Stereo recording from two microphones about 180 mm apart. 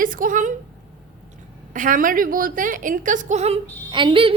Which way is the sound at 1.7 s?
45° right (ahead or behind).